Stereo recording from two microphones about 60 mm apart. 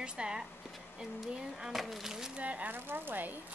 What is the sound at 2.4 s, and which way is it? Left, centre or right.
Speech, right.